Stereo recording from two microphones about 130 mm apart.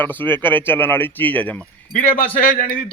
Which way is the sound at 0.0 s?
15° left (ahead or behind).